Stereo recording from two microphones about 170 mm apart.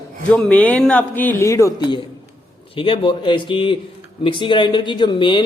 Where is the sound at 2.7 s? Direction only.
30° left (ahead or behind).